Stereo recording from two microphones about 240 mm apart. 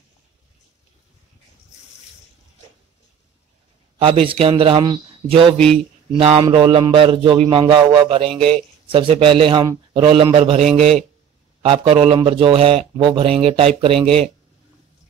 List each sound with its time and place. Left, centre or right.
4.0 s a man's voice: right
11.6 s a man's voice: right